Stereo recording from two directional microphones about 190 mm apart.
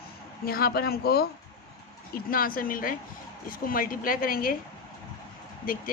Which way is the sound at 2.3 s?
50° left (ahead or behind).